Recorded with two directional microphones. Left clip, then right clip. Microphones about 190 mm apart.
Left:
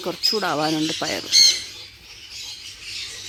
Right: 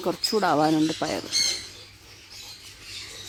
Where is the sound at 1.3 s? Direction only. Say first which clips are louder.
Left 12 dB; 55° right (ahead or behind).